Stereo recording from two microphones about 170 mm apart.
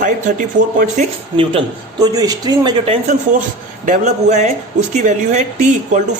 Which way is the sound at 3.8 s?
45° right (ahead or behind).